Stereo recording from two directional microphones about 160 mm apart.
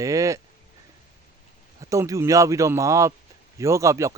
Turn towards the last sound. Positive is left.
turn(degrees=-20)  # may be behind; listen again after turning